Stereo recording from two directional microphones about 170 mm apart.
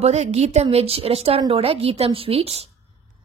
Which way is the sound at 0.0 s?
40° right (ahead or behind).